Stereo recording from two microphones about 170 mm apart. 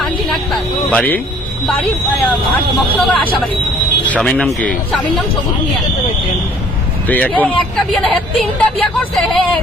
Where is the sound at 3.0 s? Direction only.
5° left (ahead or behind).